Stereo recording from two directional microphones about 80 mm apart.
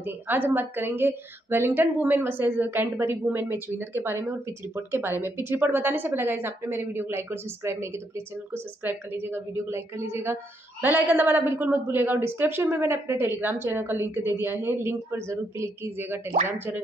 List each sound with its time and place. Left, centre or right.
0.0 s a woman's voice: right